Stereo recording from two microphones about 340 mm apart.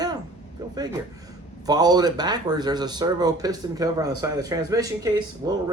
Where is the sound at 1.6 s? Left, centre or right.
Centre.